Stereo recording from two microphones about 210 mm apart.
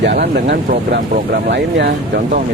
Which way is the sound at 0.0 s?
50° right (ahead or behind).